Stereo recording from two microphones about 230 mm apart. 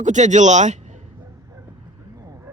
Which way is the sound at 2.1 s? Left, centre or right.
Centre.